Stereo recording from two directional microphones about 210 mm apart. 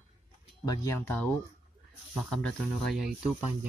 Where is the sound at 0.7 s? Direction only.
15° left (ahead or behind).